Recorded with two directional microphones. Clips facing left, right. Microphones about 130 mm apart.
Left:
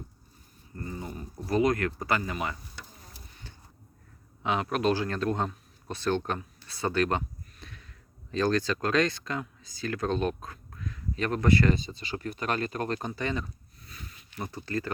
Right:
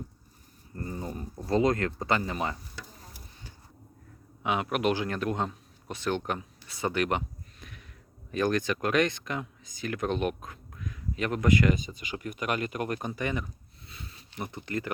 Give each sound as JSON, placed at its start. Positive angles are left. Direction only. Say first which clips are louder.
{"t": 0.8, "sound": "speech", "louder": "right 2 dB", "side_deg": -35}
{"t": 4.7, "sound": "speech", "louder": "left 2 dB", "side_deg": -15}
{"t": 13.8, "sound": "a sound", "louder": "right 1 dB", "side_deg": -30}
{"t": 14.3, "sound": "speech", "louder": "left 1 dB", "side_deg": -20}